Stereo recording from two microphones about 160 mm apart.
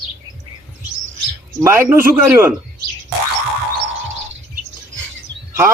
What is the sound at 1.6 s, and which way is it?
Speech, 15° right (ahead or behind).